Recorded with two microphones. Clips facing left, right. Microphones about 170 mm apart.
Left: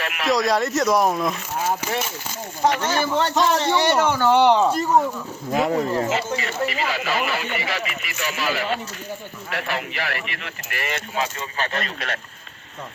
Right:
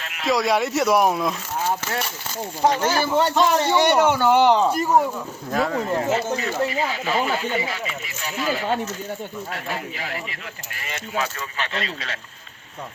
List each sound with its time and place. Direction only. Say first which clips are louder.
0.0 s speech: left 1 dB; 75° left (ahead or behind)
0.3 s speech: right 1 dB; 5° right (ahead or behind)
1.3 s speech: even; 10° left (ahead or behind)
2.8 s speech: right 2 dB; 5° right (ahead or behind)
5.5 s speech: left 2 dB; 20° left (ahead or behind)
6.1 s speech: right 2 dB; 80° left
11.2 s speech: left 1 dB; 40° left (ahead or behind); by 12.2 s 55° left (ahead or behind)